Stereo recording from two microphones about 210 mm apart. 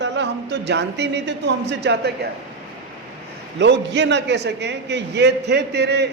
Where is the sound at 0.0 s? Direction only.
55° right (ahead or behind).